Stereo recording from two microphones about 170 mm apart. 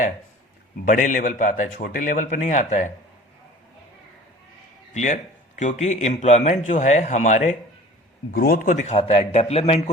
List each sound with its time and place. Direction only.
0.9 s a man's voice: 50° left (ahead or behind)
4.9 s a man's voice: 45° left (ahead or behind)
8.3 s a man's voice: 65° left (ahead or behind); by 9.9 s 35° left (ahead or behind)